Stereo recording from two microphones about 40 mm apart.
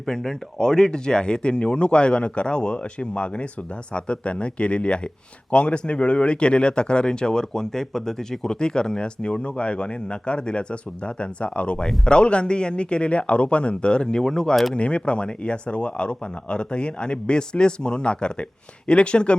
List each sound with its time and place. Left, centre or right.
0.0 s speech: centre
14.2 s speech: centre
14.8 s speech: left